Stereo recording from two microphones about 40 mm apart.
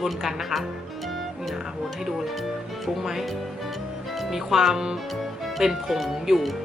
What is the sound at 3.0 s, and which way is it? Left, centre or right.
Speech, centre.